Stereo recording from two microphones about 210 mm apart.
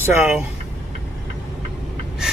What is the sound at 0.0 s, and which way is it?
Speech, 10° right (ahead or behind).